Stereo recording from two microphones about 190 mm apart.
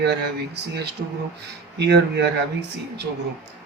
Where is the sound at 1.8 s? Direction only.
60° right (ahead or behind).